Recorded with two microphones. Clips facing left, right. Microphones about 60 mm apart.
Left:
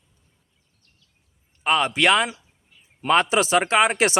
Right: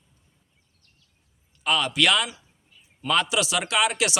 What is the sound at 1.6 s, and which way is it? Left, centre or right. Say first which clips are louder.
Speech: left 3 dB; left.